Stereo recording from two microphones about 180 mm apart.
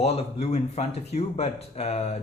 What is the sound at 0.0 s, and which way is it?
Speech, 35° left (ahead or behind).